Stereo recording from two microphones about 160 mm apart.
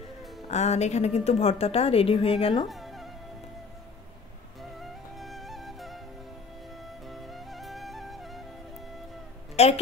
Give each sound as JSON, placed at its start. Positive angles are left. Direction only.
{"t": 0.5, "sound": "a woman's voice", "side_deg": 45}
{"t": 2.7, "sound": "music", "side_deg": 0}
{"t": 4.7, "sound": "music", "side_deg": 0}
{"t": 7.1, "sound": "music", "side_deg": 0}
{"t": 9.6, "sound": "a woman's voice", "side_deg": 40}